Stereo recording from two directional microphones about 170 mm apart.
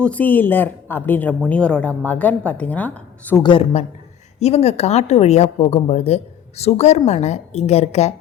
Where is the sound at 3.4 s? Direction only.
30° left (ahead or behind).